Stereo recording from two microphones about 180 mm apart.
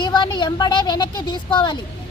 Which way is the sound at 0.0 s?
25° left (ahead or behind).